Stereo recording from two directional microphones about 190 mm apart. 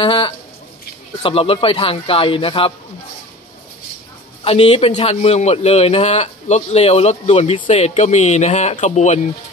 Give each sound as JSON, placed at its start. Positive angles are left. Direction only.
{"t": 0.0, "sound": "speech", "side_deg": 25}
{"t": 4.5, "sound": "a man's voice", "side_deg": 30}